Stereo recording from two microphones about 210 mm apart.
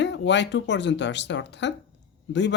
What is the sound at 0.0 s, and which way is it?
A man's voice, 55° left (ahead or behind).